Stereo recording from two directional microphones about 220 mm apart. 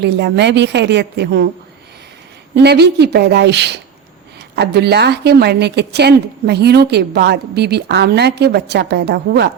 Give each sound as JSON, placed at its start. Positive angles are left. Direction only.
{"t": 0.0, "sound": "a woman's voice", "side_deg": -50}
{"t": 2.6, "sound": "a woman's voice", "side_deg": -50}